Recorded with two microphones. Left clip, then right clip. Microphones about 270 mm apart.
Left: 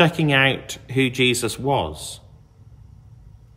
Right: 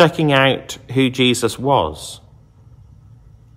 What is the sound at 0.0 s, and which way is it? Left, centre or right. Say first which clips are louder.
A man's voice: right 4 dB; centre.